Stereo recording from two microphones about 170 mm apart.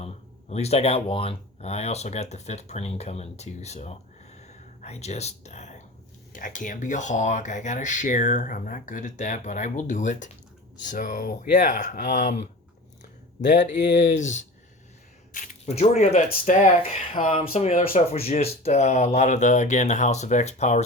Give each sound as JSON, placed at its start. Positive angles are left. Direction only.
{"t": 0.0, "sound": "speech", "side_deg": 40}
{"t": 15.3, "sound": "a sound", "side_deg": 50}
{"t": 15.7, "sound": "speech", "side_deg": 40}